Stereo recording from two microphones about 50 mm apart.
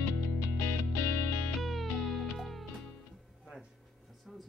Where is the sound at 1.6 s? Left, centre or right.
Centre.